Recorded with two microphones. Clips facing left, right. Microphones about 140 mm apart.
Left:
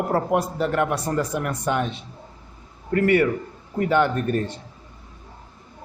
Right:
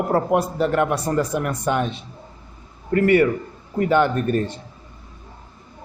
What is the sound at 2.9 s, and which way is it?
Speech, 30° right (ahead or behind).